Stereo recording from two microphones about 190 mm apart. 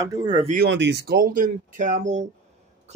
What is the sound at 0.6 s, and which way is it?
A man's voice, 65° right (ahead or behind).